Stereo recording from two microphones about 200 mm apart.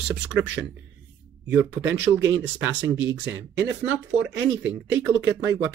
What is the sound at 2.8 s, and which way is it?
Speech, 65° right (ahead or behind).